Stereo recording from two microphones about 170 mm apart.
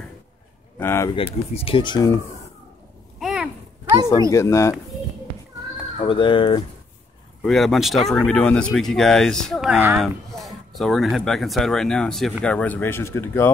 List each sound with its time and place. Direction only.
0.7 s speech: 15° left (ahead or behind)
1.1 s speech: 35° left (ahead or behind)
3.2 s a sound: centre (ahead or behind)
4.3 s speech: 15° left (ahead or behind)
6.0 s speech: 30° left (ahead or behind)
7.4 s speech: centre (ahead or behind)